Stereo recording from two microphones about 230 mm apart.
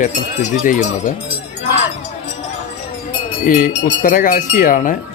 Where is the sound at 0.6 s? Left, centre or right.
Left.